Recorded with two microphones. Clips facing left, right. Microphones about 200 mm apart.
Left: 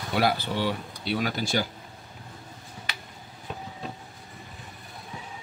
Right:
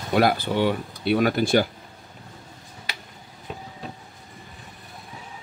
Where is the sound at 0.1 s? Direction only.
50° right (ahead or behind).